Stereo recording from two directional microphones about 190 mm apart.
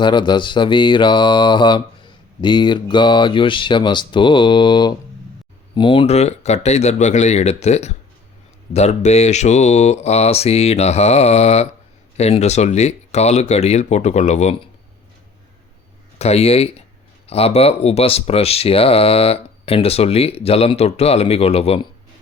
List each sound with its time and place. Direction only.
0.0 s speech: 25° left (ahead or behind)
16.1 s speech: 35° left (ahead or behind)